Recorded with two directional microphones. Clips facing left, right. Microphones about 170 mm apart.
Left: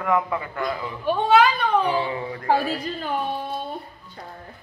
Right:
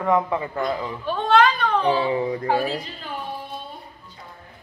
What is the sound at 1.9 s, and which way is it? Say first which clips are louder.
Speech: right 4 dB; 25° right (ahead or behind).